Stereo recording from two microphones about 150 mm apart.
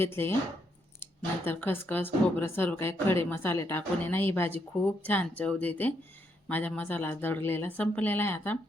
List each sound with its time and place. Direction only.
0.0 s a woman's voice: 15° left (ahead or behind)
1.5 s a woman's voice: 15° left (ahead or behind)